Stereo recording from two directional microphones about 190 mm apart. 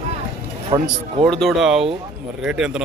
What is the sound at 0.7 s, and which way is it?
Speech, 30° right (ahead or behind).